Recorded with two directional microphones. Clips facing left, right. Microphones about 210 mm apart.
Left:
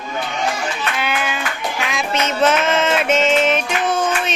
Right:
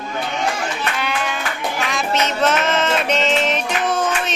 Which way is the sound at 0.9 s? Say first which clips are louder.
Left 1 dB; 5° left (ahead or behind).